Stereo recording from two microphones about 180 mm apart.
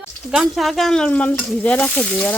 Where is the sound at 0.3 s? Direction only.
Centre (ahead or behind).